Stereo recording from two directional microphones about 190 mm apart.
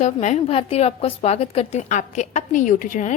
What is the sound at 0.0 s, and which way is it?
A woman's voice, 40° left (ahead or behind).